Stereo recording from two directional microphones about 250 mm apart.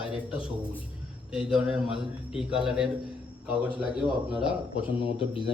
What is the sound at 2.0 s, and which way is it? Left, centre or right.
Speech, left.